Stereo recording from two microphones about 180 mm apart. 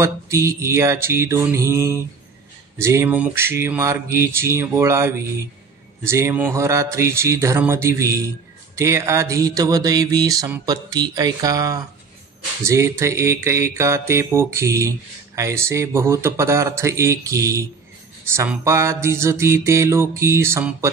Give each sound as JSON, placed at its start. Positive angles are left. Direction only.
{"t": 0.0, "sound": "mantra", "side_deg": -15}